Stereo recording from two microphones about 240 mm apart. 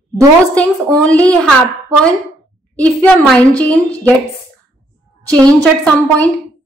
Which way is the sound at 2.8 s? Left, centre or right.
Centre.